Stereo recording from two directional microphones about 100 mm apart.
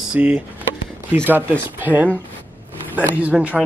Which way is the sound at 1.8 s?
15° right (ahead or behind).